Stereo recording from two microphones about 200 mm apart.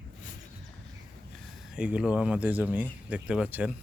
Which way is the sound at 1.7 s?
5° right (ahead or behind).